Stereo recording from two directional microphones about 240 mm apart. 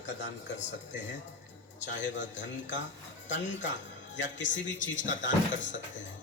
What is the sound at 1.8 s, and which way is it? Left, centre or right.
Speech, left.